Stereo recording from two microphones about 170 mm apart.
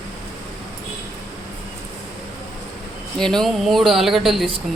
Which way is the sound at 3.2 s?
5° left (ahead or behind).